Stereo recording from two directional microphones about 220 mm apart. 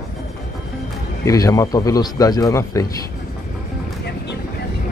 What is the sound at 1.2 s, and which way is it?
Speech, 15° left (ahead or behind).